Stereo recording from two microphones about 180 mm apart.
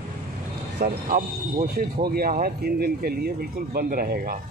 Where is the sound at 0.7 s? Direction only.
50° right (ahead or behind).